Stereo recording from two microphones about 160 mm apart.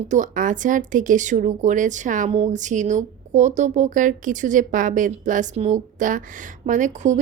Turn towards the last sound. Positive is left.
turn(degrees=-50)  # may be behind; listen again after turning